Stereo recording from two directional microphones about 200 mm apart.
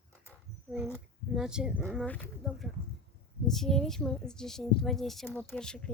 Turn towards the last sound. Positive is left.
turn(degrees=5)  # may be behind; listen again after turning